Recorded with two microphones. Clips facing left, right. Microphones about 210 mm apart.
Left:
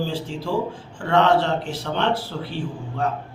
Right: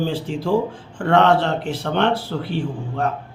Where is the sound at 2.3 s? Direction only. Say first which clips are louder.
Right 4 dB; 55° right (ahead or behind).